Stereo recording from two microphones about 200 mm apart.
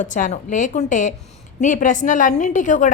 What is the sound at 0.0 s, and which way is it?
A woman's voice, 40° left (ahead or behind).